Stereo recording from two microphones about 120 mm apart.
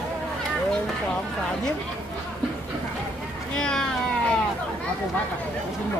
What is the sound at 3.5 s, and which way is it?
Speech, 5° left (ahead or behind).